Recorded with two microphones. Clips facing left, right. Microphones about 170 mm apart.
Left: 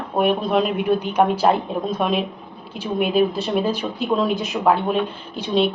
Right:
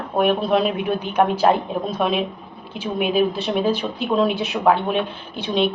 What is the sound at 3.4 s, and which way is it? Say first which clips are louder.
Speech: right 1 dB; 5° left (ahead or behind).